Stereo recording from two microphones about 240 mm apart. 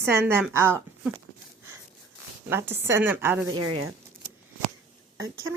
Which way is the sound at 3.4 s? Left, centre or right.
Right.